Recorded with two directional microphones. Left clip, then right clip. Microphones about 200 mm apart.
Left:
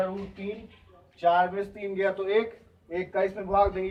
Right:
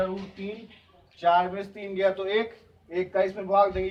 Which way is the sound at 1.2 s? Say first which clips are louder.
Even; 15° right (ahead or behind).